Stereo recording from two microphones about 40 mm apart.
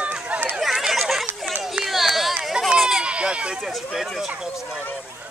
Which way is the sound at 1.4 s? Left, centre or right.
Centre.